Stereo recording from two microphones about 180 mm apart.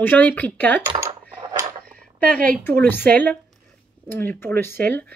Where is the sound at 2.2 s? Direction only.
50° right (ahead or behind).